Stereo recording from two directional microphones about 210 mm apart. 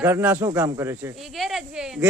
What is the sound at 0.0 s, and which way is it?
Speech, 10° right (ahead or behind).